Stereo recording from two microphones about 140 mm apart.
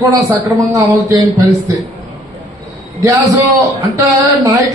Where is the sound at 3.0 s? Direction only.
20° right (ahead or behind).